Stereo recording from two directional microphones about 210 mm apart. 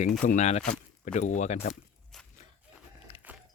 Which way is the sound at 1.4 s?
35° left (ahead or behind).